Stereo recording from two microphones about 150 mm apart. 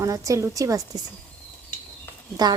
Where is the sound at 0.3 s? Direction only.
20° right (ahead or behind).